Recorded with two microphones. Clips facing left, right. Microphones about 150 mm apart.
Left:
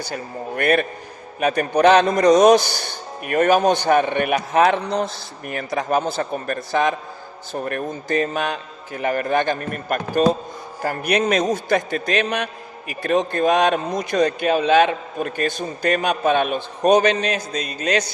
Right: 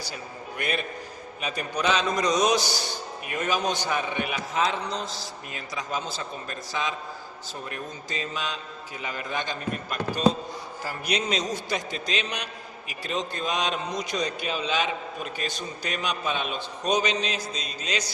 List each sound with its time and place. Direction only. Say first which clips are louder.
0.0 s a man's voice: left 9 dB; 55° left (ahead or behind)